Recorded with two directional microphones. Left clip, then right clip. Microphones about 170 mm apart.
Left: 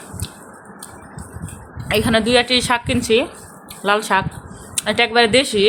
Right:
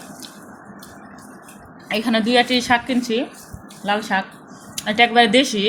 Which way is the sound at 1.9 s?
25° left (ahead or behind).